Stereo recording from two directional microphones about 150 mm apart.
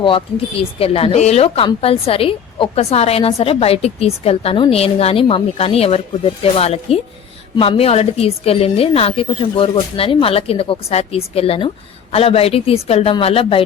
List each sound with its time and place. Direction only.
0.0 s speech: 35° left (ahead or behind)